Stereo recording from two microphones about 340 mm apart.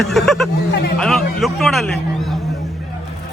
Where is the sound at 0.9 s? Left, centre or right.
Centre.